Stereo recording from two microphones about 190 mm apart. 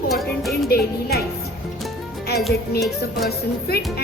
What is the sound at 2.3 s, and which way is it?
Music, 60° left (ahead or behind).